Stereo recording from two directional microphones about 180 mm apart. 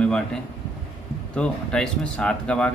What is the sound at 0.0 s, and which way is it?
Speech, 5° left (ahead or behind).